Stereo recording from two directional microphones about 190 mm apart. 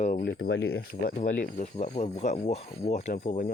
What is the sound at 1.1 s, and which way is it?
Speech, 35° left (ahead or behind).